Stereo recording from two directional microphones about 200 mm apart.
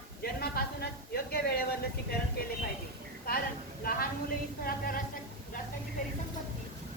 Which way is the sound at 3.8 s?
45° left (ahead or behind).